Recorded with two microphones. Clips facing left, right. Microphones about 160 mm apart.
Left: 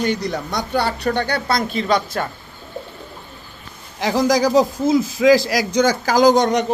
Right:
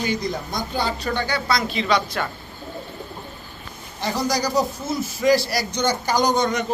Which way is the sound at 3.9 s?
90° left.